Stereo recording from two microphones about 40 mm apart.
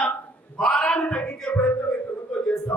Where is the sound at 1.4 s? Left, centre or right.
Left.